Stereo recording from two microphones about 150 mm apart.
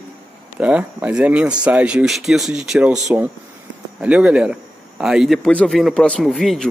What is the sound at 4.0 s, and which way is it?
A man's voice, 5° right (ahead or behind).